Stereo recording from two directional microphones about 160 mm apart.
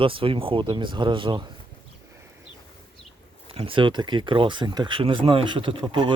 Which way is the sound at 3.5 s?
35° right (ahead or behind).